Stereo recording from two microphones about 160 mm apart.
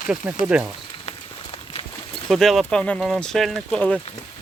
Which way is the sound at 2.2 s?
Centre (ahead or behind).